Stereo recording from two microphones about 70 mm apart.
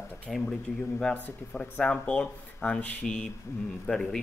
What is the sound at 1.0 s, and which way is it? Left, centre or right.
Speech, centre.